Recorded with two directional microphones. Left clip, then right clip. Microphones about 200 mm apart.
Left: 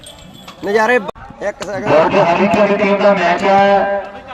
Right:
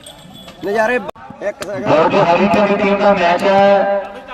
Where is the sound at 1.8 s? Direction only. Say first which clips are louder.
Left 1 dB; 15° left (ahead or behind).